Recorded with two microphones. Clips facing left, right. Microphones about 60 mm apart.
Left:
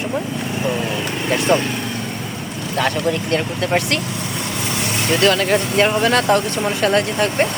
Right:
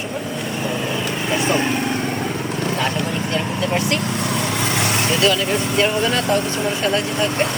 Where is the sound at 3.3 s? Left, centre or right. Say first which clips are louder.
Even; left.